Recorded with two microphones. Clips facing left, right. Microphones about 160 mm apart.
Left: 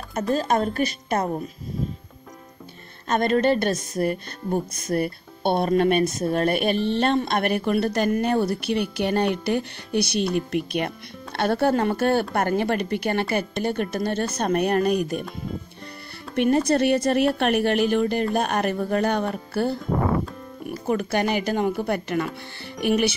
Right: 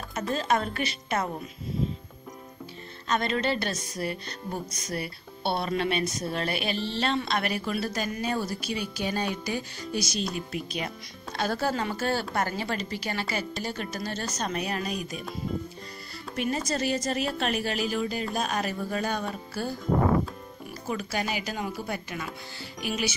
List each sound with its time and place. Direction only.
0.3 s a woman's voice: 40° left (ahead or behind)
3.1 s a woman's voice: 50° left (ahead or behind)
16.3 s speech: 60° left (ahead or behind)